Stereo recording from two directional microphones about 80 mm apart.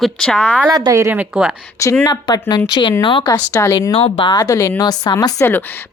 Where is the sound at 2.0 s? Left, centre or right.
Left.